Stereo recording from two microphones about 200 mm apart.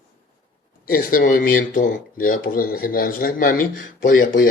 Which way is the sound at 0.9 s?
45° left (ahead or behind).